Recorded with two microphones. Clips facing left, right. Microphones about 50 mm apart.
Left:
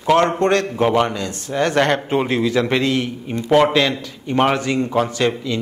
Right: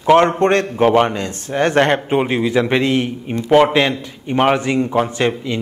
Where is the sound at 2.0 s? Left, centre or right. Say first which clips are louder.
Right 2 dB; centre.